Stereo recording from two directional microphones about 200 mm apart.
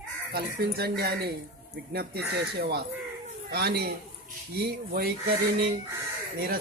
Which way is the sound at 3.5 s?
50° right (ahead or behind).